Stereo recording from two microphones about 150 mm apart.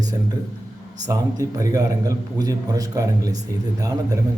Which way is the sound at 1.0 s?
25° right (ahead or behind).